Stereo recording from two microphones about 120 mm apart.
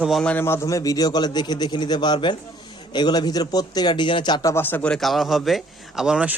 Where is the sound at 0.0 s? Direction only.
Centre (ahead or behind).